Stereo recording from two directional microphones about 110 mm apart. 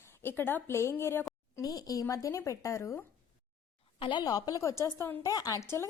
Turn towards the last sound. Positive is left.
turn(degrees=35)  # may be behind; listen again after turning